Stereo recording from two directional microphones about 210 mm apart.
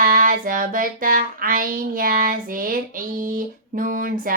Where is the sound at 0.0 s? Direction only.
40° right (ahead or behind).